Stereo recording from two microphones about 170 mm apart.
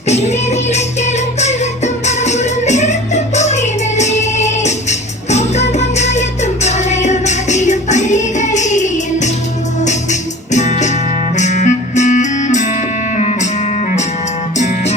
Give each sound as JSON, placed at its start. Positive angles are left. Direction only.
{"t": 0.1, "sound": "music", "side_deg": 40}